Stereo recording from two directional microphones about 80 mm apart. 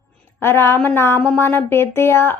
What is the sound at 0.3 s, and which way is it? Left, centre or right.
Speech, left.